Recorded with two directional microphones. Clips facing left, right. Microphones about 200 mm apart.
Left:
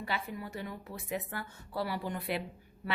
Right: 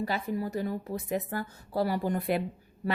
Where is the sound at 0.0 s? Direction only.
40° right (ahead or behind).